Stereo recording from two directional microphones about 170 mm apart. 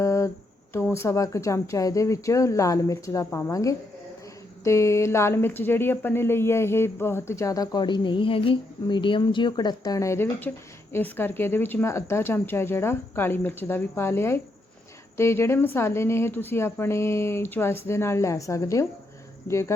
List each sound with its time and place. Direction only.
0.0 s humming: 15° left (ahead or behind)
0.7 s speech: 15° left (ahead or behind)